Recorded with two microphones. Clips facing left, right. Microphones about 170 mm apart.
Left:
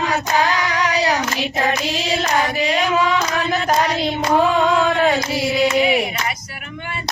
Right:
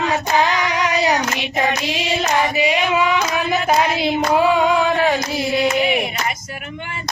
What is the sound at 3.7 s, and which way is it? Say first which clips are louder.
Female singing: right 2 dB; 5° right (ahead or behind).